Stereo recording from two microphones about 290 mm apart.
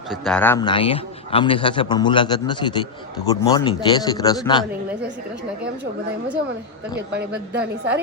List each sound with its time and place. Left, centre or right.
0.1 s a man's voice: centre
7.1 s a woman's voice: right